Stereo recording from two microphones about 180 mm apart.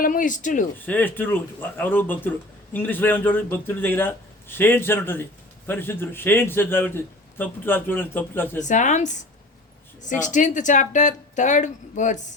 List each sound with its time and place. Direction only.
0.0 s speech: 45° left (ahead or behind)
0.9 s a man's voice: 10° left (ahead or behind)
8.6 s speech: 45° left (ahead or behind)